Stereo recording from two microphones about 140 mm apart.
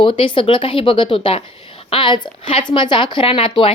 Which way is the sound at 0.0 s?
40° left (ahead or behind).